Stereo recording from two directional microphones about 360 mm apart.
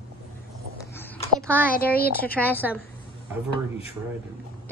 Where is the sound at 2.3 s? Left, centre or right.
Centre.